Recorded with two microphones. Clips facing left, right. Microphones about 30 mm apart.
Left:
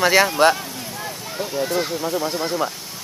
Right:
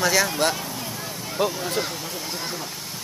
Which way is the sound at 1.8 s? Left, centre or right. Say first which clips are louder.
Left 6 dB; centre.